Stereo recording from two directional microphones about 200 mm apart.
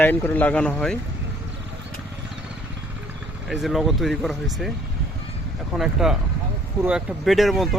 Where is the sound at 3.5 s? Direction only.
Centre (ahead or behind).